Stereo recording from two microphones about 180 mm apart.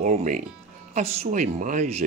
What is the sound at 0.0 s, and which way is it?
Speech, 45° right (ahead or behind).